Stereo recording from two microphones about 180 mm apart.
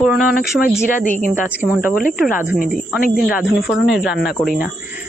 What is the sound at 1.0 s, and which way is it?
Speech, 45° right (ahead or behind).